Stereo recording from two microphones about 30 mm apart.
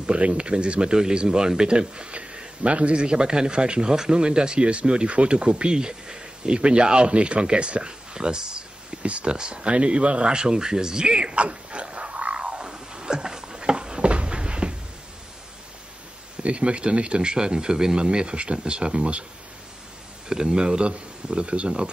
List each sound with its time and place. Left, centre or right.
0.0 s speech: right
9.0 s speech: right
9.3 s speech: right
10.3 s a sound: right
16.4 s speech: right
20.2 s speech: right